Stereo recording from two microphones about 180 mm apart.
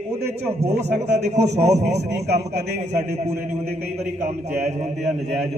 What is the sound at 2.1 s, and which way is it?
Speech, 65° right (ahead or behind).